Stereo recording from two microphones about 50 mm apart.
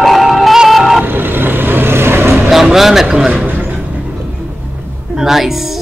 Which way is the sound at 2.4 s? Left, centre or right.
Centre.